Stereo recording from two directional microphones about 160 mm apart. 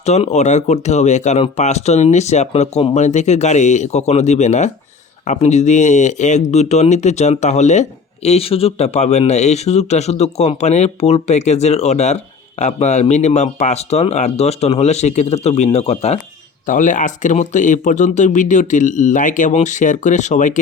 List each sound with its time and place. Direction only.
0.0 s speech: 45° left (ahead or behind)
16.6 s speech: 55° left (ahead or behind)